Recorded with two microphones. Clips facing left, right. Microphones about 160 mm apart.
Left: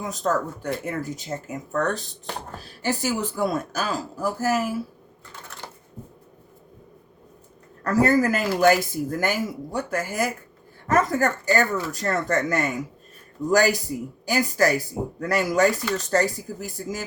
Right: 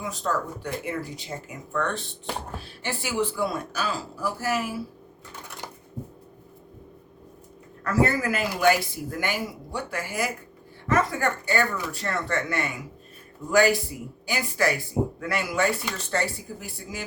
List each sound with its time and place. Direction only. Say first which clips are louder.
0.1 s speech: left 5 dB; 40° left (ahead or behind)
7.9 s speech: left 4 dB; 40° left (ahead or behind)